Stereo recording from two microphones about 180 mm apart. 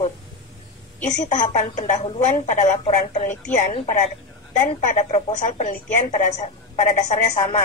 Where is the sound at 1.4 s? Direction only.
40° left (ahead or behind).